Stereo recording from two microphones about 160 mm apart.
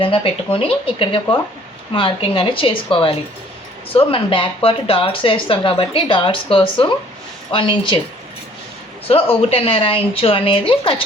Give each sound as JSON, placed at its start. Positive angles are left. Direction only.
{"t": 0.0, "sound": "speech", "side_deg": 35}
{"t": 9.0, "sound": "speech", "side_deg": 35}